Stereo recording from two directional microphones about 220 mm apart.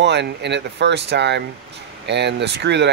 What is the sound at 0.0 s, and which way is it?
Speech, 50° right (ahead or behind).